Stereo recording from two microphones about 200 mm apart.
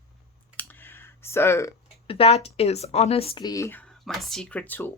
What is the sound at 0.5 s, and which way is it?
Clicking, 10° left (ahead or behind).